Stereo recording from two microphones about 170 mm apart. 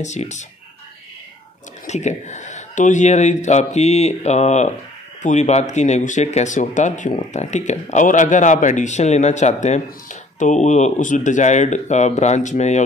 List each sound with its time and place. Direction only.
0.0 s speech: 45° left (ahead or behind)
1.9 s speech: 45° left (ahead or behind)